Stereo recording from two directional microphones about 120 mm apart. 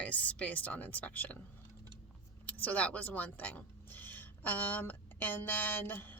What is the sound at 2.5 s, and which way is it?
Speech, 10° left (ahead or behind).